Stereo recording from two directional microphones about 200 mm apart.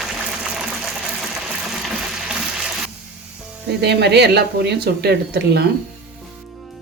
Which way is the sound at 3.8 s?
55° right (ahead or behind).